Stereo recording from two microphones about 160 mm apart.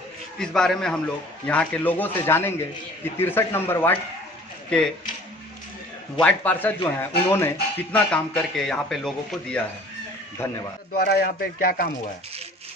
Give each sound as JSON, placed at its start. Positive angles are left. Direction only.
{"t": 0.4, "sound": "a man's voice", "side_deg": 5}
{"t": 6.2, "sound": "a man's voice", "side_deg": 10}
{"t": 10.4, "sound": "a man's voice", "side_deg": 15}
{"t": 11.0, "sound": "speech", "side_deg": 80}